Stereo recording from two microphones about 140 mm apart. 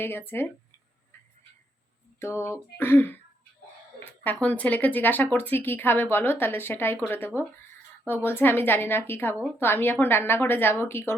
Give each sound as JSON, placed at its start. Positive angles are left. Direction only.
{"t": 0.0, "sound": "speech", "side_deg": 15}
{"t": 2.1, "sound": "a sound", "side_deg": 20}
{"t": 2.7, "sound": "speech", "side_deg": 15}